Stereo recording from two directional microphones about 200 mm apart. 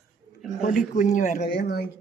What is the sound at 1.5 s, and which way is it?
Speech, 50° left (ahead or behind).